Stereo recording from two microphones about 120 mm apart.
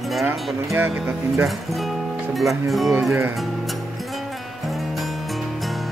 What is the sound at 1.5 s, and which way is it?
Speech, centre (ahead or behind).